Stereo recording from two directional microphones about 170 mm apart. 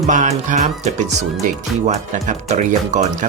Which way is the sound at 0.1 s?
45° right (ahead or behind).